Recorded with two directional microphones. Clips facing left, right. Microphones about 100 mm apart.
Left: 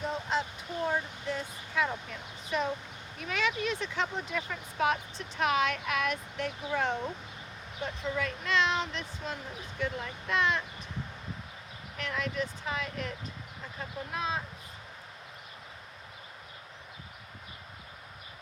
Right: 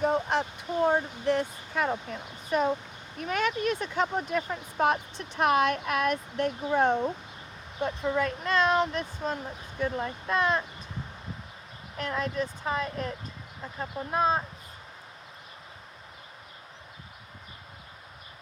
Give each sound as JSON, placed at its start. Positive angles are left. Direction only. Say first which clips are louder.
{"t": 0.0, "sound": "a sound", "louder": "right 6 dB", "side_deg": -55}
{"t": 1.2, "sound": "speech", "louder": "right 9 dB", "side_deg": -60}
{"t": 11.9, "sound": "speech", "louder": "right 4 dB", "side_deg": -35}